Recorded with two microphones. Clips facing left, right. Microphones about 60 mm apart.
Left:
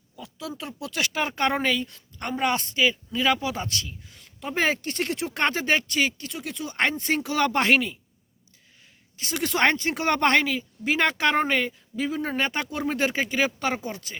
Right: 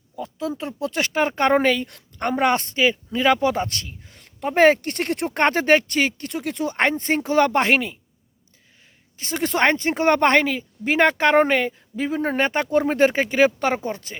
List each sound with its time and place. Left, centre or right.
0.2 s a woman's voice: right
6.7 s a woman's voice: right
9.1 s a woman's voice: right